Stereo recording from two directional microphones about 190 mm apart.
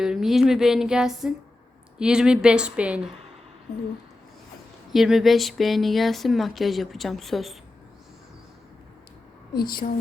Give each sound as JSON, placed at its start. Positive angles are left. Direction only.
{"t": 0.0, "sound": "speech", "side_deg": 0}
{"t": 4.9, "sound": "speech", "side_deg": 0}
{"t": 9.6, "sound": "speech", "side_deg": 50}